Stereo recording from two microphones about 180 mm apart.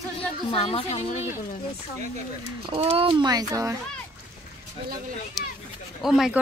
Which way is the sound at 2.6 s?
30° right (ahead or behind).